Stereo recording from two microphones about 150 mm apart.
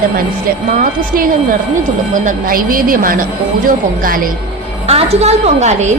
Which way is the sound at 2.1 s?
65° right (ahead or behind).